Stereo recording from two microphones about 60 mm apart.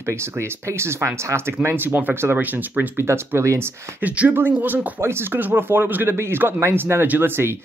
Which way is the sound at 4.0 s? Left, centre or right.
Right.